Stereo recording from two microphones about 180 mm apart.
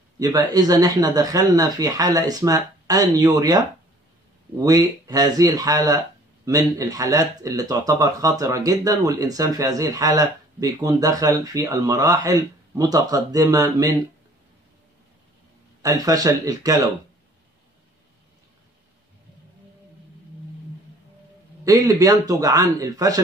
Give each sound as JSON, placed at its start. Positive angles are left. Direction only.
{"t": 0.2, "sound": "speech", "side_deg": -20}
{"t": 4.6, "sound": "speech", "side_deg": -20}
{"t": 15.8, "sound": "speech", "side_deg": -20}
{"t": 21.6, "sound": "speech", "side_deg": -20}